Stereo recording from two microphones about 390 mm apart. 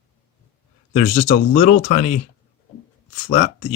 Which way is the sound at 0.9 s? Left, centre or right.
Left.